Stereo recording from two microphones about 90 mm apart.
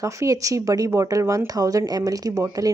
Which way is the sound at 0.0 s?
35° right (ahead or behind).